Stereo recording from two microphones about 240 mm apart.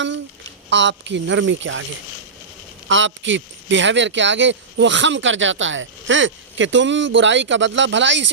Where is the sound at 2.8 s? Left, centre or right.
Right.